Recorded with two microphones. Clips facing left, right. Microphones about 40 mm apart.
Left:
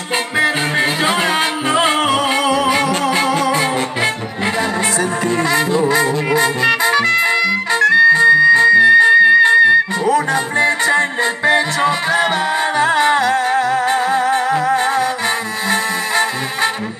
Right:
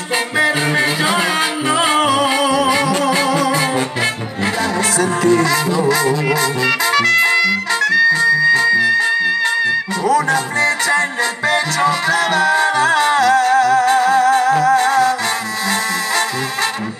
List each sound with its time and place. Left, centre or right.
0.4 s music: centre
5.5 s music: left